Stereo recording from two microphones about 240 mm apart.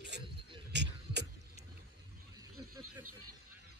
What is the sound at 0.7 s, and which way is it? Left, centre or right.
Music, right.